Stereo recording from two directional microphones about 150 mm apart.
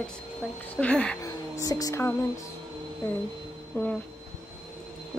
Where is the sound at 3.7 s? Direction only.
5° left (ahead or behind).